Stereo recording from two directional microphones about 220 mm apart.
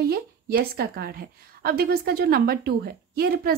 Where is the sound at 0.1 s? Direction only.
45° right (ahead or behind).